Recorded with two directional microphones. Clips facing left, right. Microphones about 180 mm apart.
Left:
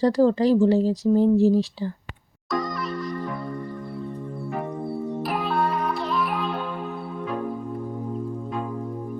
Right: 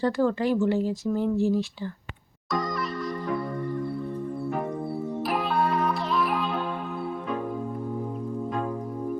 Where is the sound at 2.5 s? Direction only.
Centre (ahead or behind).